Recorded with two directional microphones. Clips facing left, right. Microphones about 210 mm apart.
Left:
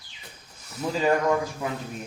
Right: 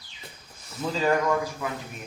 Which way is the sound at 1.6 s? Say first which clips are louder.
Left 2 dB; 25° left (ahead or behind).